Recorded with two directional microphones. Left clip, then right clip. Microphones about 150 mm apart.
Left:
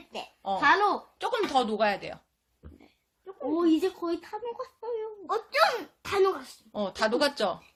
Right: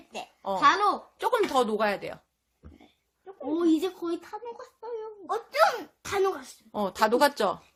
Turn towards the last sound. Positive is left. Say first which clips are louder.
# right 3 dB
turn(degrees=-40)  # may be behind; listen again after turning